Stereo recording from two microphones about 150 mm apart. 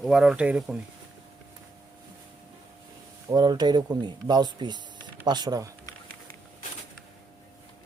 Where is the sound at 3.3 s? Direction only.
25° right (ahead or behind).